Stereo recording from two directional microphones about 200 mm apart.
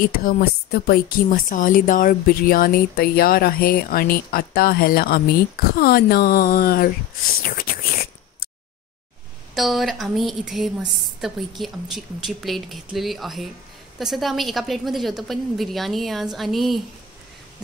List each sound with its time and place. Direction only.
0.0 s speech: 45° left (ahead or behind)
7.4 s a sound: 45° left (ahead or behind)
9.6 s a woman's voice: centre (ahead or behind)